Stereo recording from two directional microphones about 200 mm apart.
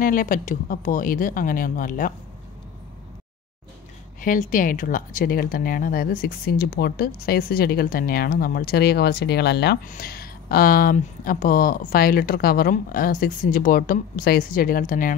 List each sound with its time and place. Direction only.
0.0 s speech: 45° left (ahead or behind)
4.2 s speech: 40° left (ahead or behind)